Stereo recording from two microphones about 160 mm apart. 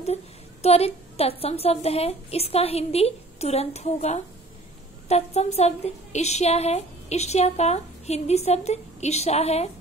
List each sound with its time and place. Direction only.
0.0 s a woman's voice: 40° left (ahead or behind)